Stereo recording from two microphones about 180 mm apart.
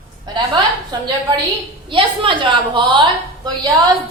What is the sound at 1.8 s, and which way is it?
A woman's voice, 30° right (ahead or behind).